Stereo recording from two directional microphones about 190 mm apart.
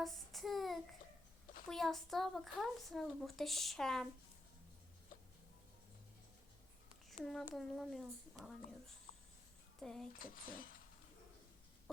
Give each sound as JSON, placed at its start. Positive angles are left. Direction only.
{"t": 0.0, "sound": "child singing", "side_deg": 0}
{"t": 1.6, "sound": "speech", "side_deg": 0}
{"t": 7.1, "sound": "speech", "side_deg": 0}
{"t": 9.8, "sound": "speech", "side_deg": 5}
{"t": 10.1, "sound": "speech", "side_deg": 45}